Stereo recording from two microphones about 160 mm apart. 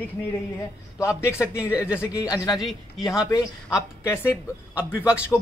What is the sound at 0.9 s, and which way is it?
A man's voice, 15° left (ahead or behind).